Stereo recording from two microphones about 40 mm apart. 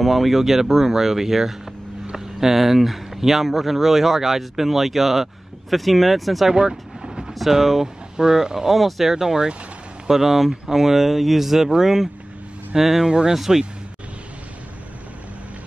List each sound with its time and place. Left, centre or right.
0.0 s speech: centre
6.5 s vehicle: centre
7.3 s speech: centre
8.7 s speech: centre
9.1 s speech: centre